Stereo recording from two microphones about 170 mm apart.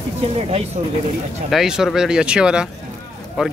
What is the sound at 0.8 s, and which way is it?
Speech, 45° right (ahead or behind).